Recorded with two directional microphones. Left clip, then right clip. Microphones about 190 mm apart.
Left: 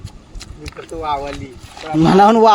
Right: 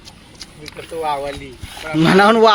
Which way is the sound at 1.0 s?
50° left (ahead or behind).